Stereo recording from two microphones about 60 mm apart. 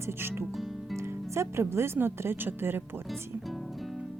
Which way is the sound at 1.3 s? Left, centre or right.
Right.